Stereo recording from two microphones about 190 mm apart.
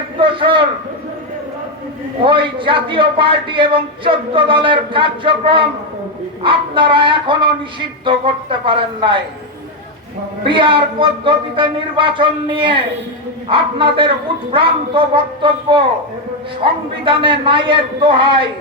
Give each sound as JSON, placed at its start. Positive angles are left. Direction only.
{"t": 0.2, "sound": "a sound", "side_deg": -25}
{"t": 2.2, "sound": "a man's voice", "side_deg": -25}
{"t": 10.4, "sound": "a man's voice", "side_deg": -25}
{"t": 17.1, "sound": "a man's voice", "side_deg": -25}